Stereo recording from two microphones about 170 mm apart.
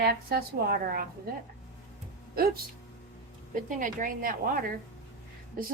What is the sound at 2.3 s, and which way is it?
Speech, 65° right (ahead or behind).